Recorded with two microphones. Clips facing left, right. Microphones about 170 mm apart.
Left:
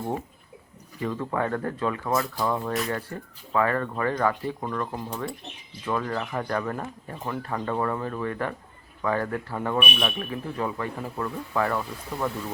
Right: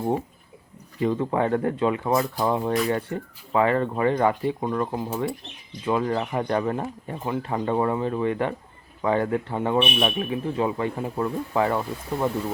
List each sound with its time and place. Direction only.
1.0 s speech: 20° right (ahead or behind)